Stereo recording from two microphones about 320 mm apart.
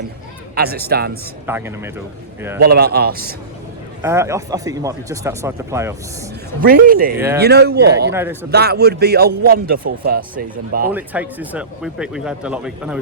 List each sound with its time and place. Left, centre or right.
0.5 s a man's voice: right
1.5 s speech: centre
2.6 s a man's voice: right
4.0 s speech: centre
6.6 s a man's voice: right
8.1 s speech: centre
8.4 s a man's voice: right
10.9 s speech: centre